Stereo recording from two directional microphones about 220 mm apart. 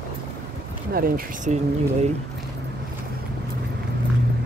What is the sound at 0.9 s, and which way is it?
Speech, 40° right (ahead or behind).